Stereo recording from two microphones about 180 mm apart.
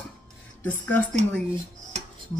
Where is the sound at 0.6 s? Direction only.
10° left (ahead or behind).